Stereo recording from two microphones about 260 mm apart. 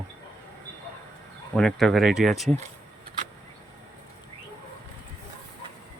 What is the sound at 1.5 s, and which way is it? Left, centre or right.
Speech, centre.